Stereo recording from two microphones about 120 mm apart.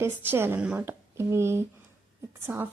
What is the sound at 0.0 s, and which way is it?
A woman's voice, 20° right (ahead or behind).